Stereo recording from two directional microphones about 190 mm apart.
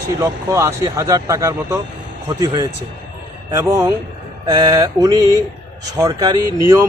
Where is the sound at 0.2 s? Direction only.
15° right (ahead or behind).